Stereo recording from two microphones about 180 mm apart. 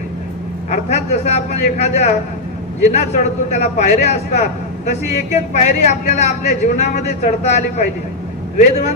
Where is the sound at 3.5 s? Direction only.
40° left (ahead or behind).